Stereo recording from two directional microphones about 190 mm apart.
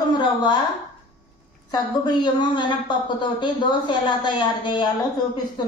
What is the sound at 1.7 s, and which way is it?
A woman's voice, 25° left (ahead or behind).